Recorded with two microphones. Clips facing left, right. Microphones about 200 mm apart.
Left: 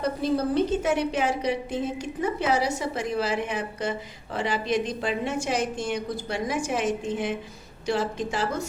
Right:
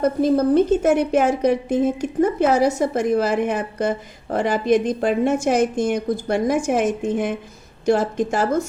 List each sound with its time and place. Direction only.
0.0 s a woman's voice: 50° right (ahead or behind)